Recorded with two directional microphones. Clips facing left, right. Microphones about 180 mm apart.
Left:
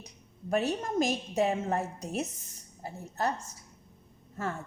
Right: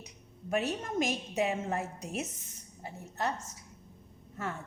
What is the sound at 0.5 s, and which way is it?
A woman's voice, 35° left (ahead or behind).